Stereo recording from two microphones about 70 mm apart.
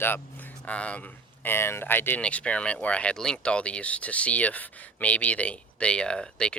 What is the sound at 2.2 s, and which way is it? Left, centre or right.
Speech, centre.